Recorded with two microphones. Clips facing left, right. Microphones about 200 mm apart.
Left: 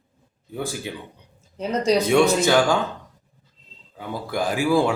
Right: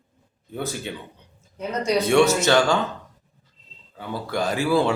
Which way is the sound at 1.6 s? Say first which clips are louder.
Left 3 dB; 35° left (ahead or behind).